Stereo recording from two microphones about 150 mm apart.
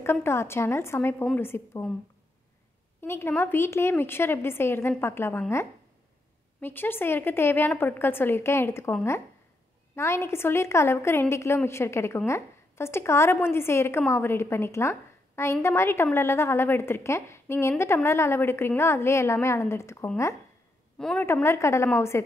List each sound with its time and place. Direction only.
0.0 s a woman's voice: 15° left (ahead or behind)
3.0 s a woman's voice: 15° left (ahead or behind)
6.6 s a woman's voice: 15° left (ahead or behind)
9.9 s a woman's voice: 20° left (ahead or behind)
21.0 s a woman's voice: 5° left (ahead or behind)
21.3 s a woman's voice: 15° left (ahead or behind)